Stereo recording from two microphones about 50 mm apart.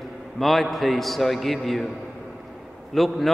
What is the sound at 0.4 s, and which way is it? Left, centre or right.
A man's voice, centre.